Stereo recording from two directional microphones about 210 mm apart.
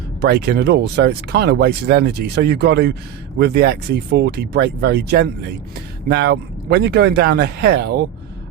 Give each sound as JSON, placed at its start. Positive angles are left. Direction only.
{"t": 0.2, "sound": "speech", "side_deg": -50}